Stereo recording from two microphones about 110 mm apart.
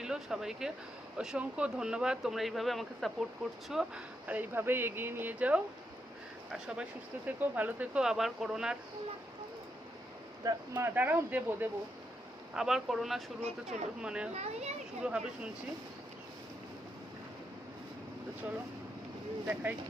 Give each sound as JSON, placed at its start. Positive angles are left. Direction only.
{"t": 0.0, "sound": "speech", "side_deg": -5}
{"t": 10.4, "sound": "speech", "side_deg": -35}
{"t": 10.8, "sound": "speech", "side_deg": -20}
{"t": 12.5, "sound": "speech", "side_deg": -5}
{"t": 13.4, "sound": "speech", "side_deg": -85}
{"t": 14.0, "sound": "speech", "side_deg": -10}
{"t": 14.3, "sound": "speech", "side_deg": -80}
{"t": 15.0, "sound": "speech", "side_deg": -5}